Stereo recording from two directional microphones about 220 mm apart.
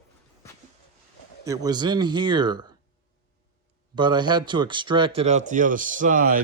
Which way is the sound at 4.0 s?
20° right (ahead or behind).